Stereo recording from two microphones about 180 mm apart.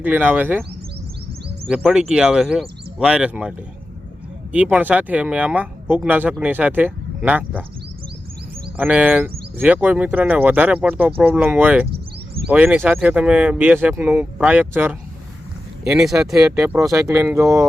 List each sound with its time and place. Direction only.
0.0 s speech: 10° right (ahead or behind)
1.6 s speech: centre (ahead or behind)
4.5 s speech: 5° right (ahead or behind)
8.7 s speech: 10° right (ahead or behind)
16.4 s speech: 15° right (ahead or behind)